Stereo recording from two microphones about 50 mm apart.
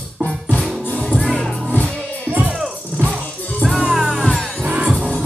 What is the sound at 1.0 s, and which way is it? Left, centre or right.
Music, centre.